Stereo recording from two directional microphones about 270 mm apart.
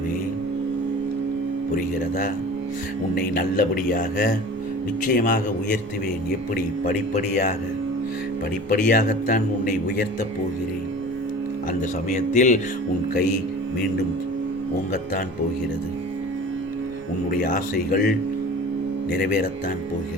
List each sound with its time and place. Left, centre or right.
1.7 s a man's voice: left
8.7 s a man's voice: left
11.7 s a man's voice: left
17.4 s a man's voice: left